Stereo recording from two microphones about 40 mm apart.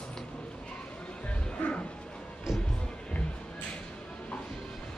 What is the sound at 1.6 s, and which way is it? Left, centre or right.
Music, left.